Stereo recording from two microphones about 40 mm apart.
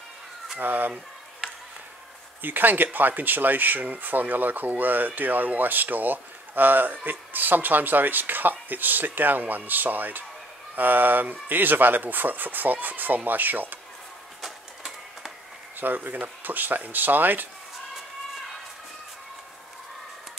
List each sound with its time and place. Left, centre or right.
0.6 s speech: right
2.4 s speech: right
15.8 s speech: right